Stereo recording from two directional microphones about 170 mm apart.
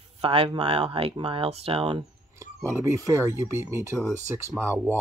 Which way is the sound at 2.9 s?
20° right (ahead or behind).